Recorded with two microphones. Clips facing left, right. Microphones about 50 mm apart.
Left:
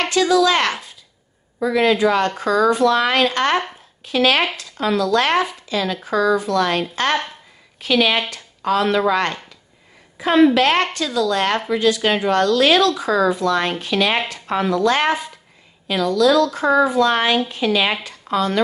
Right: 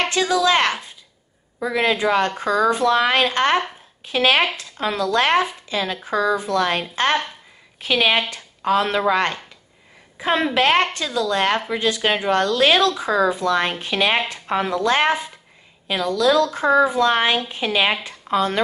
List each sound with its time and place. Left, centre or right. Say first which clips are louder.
0.0 s a woman's voice: left 3 dB; right